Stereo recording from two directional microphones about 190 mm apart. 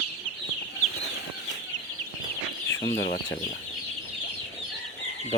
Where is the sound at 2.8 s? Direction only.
60° left (ahead or behind).